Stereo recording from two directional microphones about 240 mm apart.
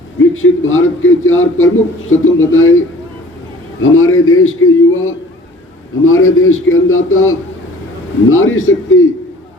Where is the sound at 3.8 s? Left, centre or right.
Left.